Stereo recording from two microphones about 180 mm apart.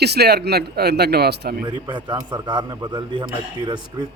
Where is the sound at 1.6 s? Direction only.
25° right (ahead or behind).